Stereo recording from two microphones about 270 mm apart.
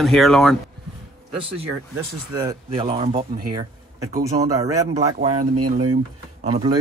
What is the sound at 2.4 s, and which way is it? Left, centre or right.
Speech, centre.